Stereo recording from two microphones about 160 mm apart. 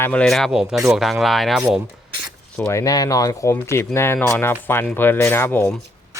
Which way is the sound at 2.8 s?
20° left (ahead or behind).